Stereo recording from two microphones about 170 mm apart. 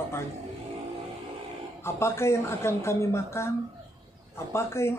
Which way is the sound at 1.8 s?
15° left (ahead or behind).